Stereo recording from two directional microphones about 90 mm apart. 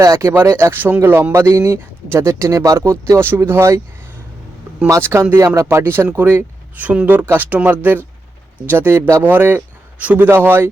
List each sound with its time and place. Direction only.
0.0 s speech: 40° right (ahead or behind)
0.3 s speech: 25° right (ahead or behind)
4.9 s speech: 30° right (ahead or behind)